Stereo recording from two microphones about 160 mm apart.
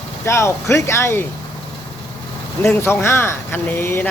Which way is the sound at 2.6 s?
15° left (ahead or behind).